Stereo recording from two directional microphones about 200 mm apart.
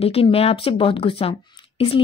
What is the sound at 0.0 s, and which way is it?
A woman's voice, 30° left (ahead or behind).